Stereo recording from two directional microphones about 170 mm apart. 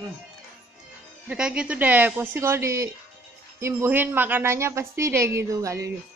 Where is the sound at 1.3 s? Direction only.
5° right (ahead or behind).